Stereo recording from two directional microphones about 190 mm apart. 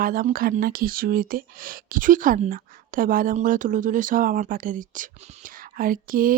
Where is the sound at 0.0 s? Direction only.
50° right (ahead or behind).